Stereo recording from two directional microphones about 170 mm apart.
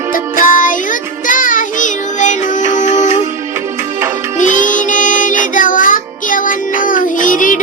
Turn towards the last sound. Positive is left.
turn(degrees=50)  # may be behind; listen again after turning